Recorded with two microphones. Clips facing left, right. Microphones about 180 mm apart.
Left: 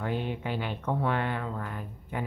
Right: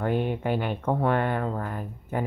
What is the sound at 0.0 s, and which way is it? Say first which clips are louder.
Speech: right 6 dB; 50° right (ahead or behind).